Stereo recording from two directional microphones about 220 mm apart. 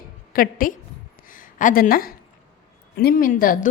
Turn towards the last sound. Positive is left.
turn(degrees=40)  # may be behind; listen again after turning